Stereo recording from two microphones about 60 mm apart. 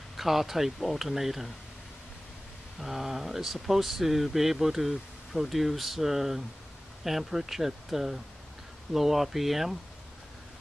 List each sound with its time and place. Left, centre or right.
0.2 s speech: centre
2.8 s speech: centre